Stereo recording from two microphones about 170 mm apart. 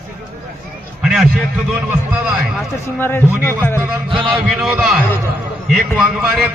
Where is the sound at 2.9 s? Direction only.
15° left (ahead or behind).